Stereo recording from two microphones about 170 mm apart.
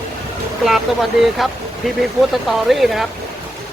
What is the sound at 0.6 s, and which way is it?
Speech, centre (ahead or behind).